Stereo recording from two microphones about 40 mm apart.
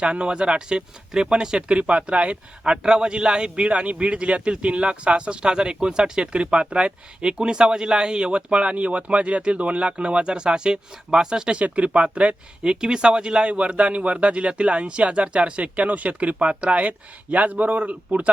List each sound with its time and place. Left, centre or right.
0.0 s speech: right
1.7 s speech: right
2.8 s speech: right
11.6 s speech: right
12.6 s speech: centre; by 18.3 s right